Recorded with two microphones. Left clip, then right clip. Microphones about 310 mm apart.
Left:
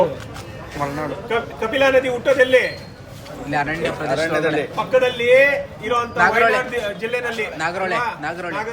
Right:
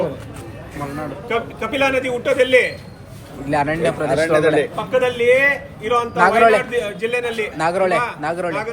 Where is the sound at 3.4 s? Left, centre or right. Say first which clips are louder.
Right 3 dB; centre.